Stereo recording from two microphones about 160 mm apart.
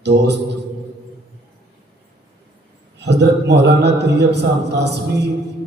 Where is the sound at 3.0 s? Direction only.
90° right.